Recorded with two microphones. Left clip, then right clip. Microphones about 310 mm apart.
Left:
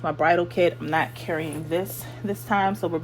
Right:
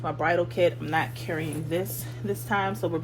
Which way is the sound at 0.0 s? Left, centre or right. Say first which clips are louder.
Left 4 dB; left.